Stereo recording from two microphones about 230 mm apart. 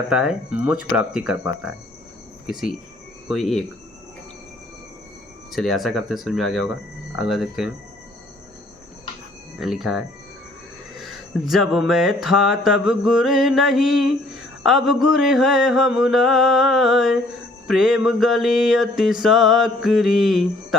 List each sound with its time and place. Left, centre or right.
0.1 s mantra: centre
5.5 s mantra: centre
9.6 s mantra: centre
11.0 s mantra: centre